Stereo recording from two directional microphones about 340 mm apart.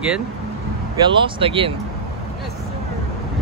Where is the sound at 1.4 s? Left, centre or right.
Centre.